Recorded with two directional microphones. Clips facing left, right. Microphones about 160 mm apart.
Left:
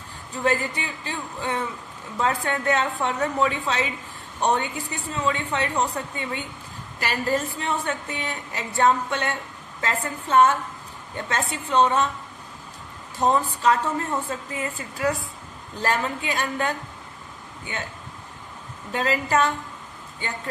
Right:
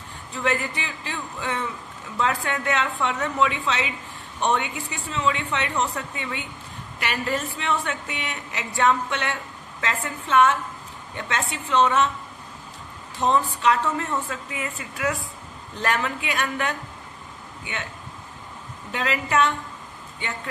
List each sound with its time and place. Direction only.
0.4 s a woman's voice: 30° left (ahead or behind)
13.1 s a woman's voice: 40° left (ahead or behind)
18.9 s a woman's voice: 35° left (ahead or behind)